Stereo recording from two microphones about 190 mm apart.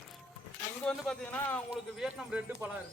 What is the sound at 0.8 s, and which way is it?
Speech, 5° left (ahead or behind).